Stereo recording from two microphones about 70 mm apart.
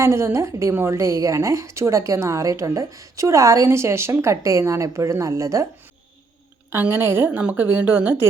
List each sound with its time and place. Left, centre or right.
0.0 s a woman's voice: right
0.9 s a woman's voice: right
6.9 s a woman's voice: right